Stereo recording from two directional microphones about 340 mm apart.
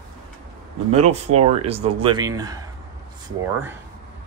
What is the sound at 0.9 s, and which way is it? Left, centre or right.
Speech, centre.